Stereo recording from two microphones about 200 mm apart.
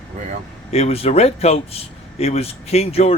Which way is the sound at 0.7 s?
30° left (ahead or behind).